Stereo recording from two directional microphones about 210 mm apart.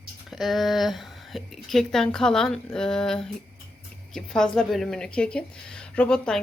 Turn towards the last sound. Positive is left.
turn(degrees=5)  # may be behind; listen again after turning